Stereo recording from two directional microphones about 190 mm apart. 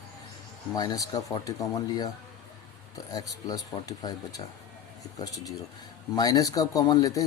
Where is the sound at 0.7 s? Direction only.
20° left (ahead or behind).